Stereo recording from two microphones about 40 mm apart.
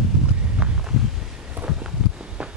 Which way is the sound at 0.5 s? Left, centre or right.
Right.